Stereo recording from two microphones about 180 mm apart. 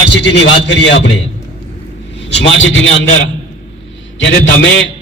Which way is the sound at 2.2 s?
85° left.